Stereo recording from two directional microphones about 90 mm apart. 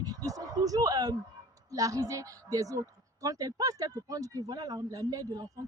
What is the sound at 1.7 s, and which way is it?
Speech, 40° right (ahead or behind).